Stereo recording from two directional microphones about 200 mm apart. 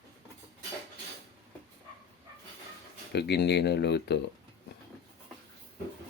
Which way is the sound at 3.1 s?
55° left (ahead or behind).